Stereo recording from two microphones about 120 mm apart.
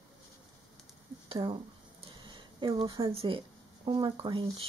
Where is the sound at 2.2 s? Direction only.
40° right (ahead or behind).